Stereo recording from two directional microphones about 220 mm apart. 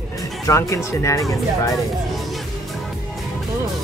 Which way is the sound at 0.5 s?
15° left (ahead or behind).